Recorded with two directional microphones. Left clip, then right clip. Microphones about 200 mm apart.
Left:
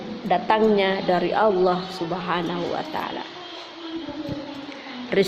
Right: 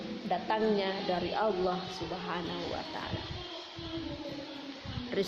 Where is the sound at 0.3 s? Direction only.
45° left (ahead or behind).